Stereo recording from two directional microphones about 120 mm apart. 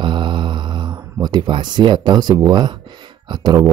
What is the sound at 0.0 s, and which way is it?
Mantra, 40° right (ahead or behind).